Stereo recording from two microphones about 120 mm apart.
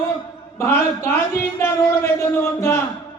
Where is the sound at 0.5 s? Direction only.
20° left (ahead or behind).